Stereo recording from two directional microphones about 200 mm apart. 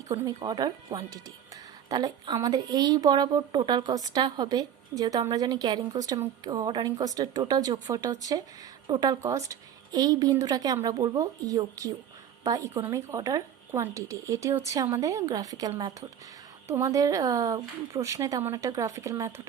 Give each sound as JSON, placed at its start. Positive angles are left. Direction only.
{"t": 0.1, "sound": "a woman's voice", "side_deg": -25}